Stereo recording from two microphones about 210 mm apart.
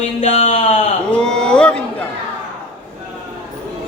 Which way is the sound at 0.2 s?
35° left (ahead or behind).